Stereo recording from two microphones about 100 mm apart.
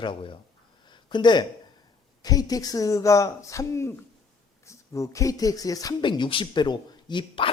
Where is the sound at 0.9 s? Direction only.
50° left (ahead or behind).